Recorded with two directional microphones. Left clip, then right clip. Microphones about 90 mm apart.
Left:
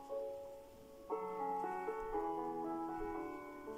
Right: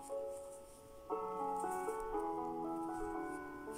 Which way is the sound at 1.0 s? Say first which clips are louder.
Right 1 dB; 15° right (ahead or behind).